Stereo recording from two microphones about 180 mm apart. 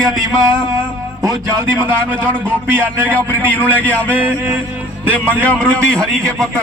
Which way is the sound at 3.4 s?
10° left (ahead or behind).